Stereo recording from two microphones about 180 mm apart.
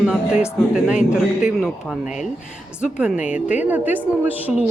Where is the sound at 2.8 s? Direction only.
5° right (ahead or behind).